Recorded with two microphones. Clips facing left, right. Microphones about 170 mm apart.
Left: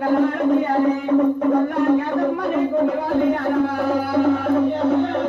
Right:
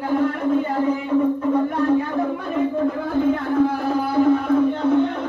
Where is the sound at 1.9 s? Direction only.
70° left (ahead or behind).